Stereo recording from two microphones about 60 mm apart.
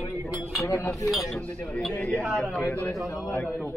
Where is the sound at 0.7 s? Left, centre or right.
Left.